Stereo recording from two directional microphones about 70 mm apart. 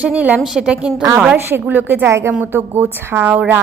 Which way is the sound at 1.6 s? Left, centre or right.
Right.